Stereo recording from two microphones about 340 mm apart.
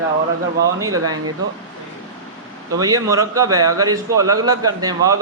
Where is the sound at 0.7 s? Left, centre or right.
Centre.